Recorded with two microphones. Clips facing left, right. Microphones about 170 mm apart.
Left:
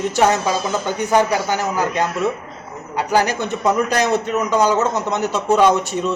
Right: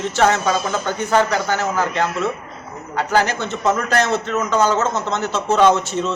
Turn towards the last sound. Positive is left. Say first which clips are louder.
# even
turn(degrees=15)  # may be behind; listen again after turning